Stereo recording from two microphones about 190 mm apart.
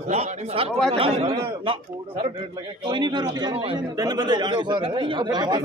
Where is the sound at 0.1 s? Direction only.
35° right (ahead or behind).